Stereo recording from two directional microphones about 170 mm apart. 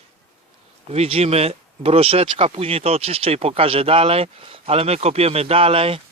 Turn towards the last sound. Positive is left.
turn(degrees=-35)  # may be behind; listen again after turning